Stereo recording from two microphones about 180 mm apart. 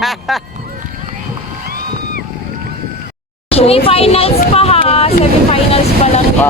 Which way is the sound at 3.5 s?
35° left (ahead or behind).